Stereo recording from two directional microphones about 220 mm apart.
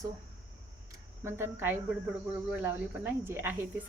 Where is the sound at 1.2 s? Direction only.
10° right (ahead or behind).